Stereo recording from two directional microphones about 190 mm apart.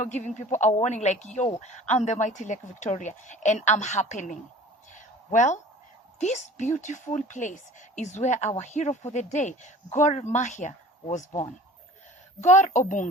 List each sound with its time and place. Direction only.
0.0 s speech: 40° left (ahead or behind)
4.9 s a sound: 40° left (ahead or behind)
6.1 s speech: 40° left (ahead or behind)